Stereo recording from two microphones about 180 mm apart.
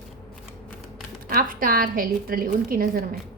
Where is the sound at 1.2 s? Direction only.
50° right (ahead or behind).